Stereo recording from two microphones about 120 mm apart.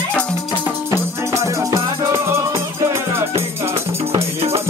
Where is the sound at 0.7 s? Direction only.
20° right (ahead or behind).